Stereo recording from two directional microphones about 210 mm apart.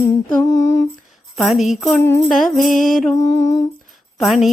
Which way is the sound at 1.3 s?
Centre (ahead or behind).